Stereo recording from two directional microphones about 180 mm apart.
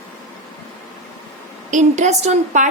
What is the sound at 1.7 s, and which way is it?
A woman's voice, 40° right (ahead or behind).